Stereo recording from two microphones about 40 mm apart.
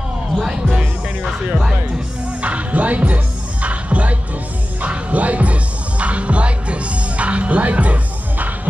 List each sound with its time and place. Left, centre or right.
0.4 s speech: centre
2.4 s music: right